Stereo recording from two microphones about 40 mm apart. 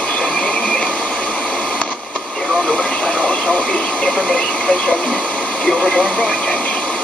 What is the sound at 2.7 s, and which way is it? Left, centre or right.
Speech, left.